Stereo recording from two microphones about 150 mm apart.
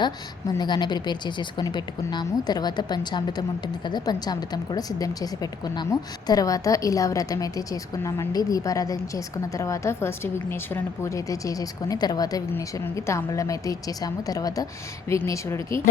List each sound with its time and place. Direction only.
0.0 s a woman's voice: 30° left (ahead or behind)